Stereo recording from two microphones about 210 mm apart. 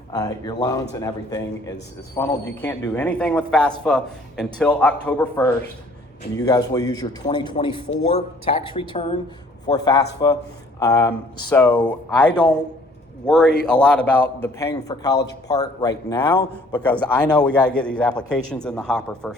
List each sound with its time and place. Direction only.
0.1 s a man's voice: 20° left (ahead or behind)
6.3 s a man's voice: 15° left (ahead or behind)
16.7 s a man's voice: 5° left (ahead or behind)